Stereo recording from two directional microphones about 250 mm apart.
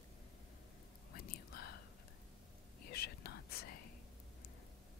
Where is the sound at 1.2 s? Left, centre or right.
Left.